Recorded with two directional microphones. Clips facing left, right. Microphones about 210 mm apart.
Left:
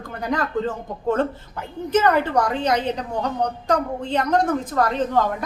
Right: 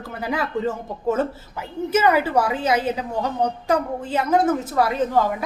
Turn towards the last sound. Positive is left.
turn(degrees=-5)  # may be behind; listen again after turning